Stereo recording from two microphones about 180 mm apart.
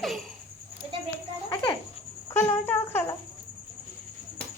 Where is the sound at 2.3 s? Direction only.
10° left (ahead or behind).